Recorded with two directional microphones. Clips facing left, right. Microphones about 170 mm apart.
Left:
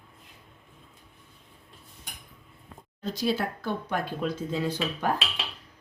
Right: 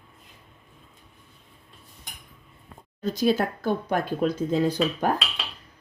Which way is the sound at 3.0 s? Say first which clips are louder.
Right 5 dB; 45° right (ahead or behind).